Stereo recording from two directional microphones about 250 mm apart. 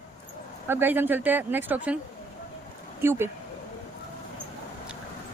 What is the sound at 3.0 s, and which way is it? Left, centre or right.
Speech, centre.